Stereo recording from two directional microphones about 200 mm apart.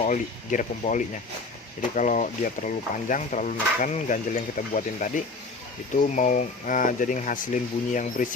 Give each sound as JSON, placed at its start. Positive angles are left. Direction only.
{"t": 0.0, "sound": "speech", "side_deg": 40}